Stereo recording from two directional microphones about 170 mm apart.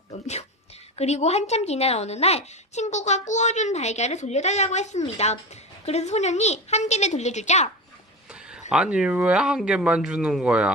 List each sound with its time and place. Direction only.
0.9 s a woman's voice: 40° left (ahead or behind)
8.3 s a sound: 5° right (ahead or behind)
8.7 s speech: 5° right (ahead or behind)